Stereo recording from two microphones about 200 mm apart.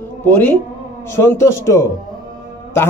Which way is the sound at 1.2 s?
15° left (ahead or behind).